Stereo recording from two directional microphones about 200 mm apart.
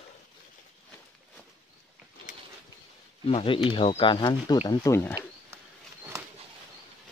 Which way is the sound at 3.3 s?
30° left (ahead or behind).